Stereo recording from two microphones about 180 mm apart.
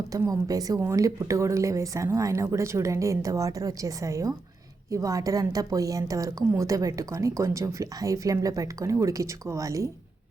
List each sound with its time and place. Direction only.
0.1 s a woman's voice: 20° right (ahead or behind)